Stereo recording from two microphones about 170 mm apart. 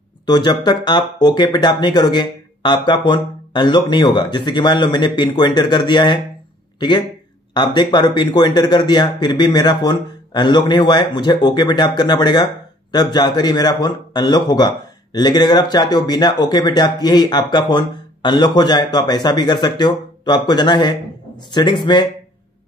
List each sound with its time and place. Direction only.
0.3 s speech: 25° left (ahead or behind)
7.5 s speech: 25° left (ahead or behind)